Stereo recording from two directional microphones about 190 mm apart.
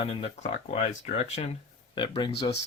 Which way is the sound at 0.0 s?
30° left (ahead or behind).